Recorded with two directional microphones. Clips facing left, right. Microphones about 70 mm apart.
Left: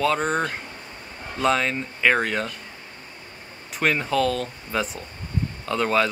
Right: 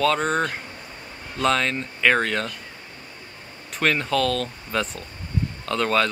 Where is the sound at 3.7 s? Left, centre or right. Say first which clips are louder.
Even; centre.